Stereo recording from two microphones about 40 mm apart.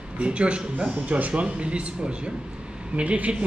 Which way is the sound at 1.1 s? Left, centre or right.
Right.